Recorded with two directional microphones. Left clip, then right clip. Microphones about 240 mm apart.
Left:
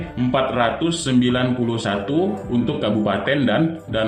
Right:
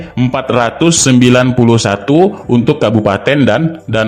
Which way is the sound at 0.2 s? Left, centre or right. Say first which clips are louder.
Right 6 dB; right.